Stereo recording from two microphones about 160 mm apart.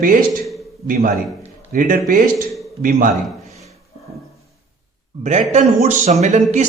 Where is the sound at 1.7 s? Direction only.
60° right (ahead or behind).